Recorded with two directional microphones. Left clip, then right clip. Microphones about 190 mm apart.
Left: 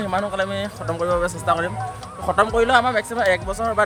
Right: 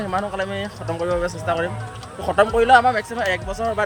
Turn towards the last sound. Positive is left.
turn(degrees=15)  # may be behind; listen again after turning